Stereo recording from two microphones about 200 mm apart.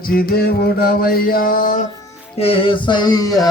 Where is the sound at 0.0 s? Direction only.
45° left (ahead or behind).